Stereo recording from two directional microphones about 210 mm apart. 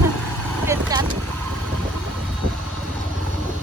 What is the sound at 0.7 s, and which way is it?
Vehicle, 15° right (ahead or behind).